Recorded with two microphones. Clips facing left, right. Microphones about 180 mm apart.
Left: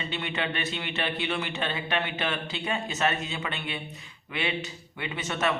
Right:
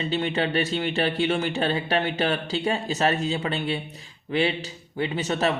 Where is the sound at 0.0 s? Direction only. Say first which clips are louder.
Right 7 dB; 35° right (ahead or behind).